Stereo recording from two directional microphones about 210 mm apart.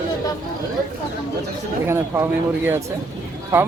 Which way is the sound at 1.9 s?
10° right (ahead or behind).